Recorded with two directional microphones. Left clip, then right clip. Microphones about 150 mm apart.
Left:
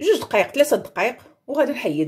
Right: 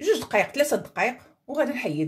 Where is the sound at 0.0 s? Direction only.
20° left (ahead or behind).